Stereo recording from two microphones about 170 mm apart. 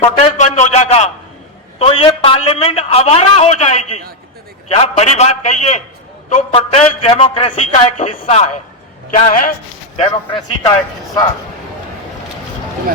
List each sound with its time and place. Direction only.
0.0 s a sound: 40° left (ahead or behind)
1.8 s a man's voice: 35° left (ahead or behind)
9.2 s a man's voice: 55° left (ahead or behind)
10.7 s speech: 20° left (ahead or behind)